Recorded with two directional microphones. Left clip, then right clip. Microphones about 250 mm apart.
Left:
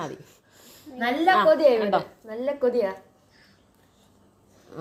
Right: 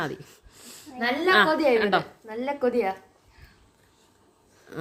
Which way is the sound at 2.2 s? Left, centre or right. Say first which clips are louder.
Left 2 dB; centre.